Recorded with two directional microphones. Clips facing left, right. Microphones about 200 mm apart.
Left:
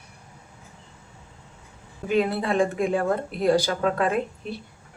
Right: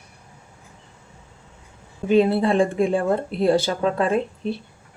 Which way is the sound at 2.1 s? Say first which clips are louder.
Right 5 dB; 30° right (ahead or behind).